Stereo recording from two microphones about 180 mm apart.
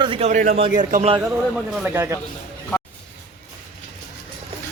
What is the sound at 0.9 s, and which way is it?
Speech, 40° right (ahead or behind).